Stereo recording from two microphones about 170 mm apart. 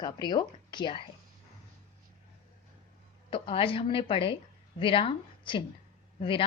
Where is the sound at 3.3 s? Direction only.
30° left (ahead or behind).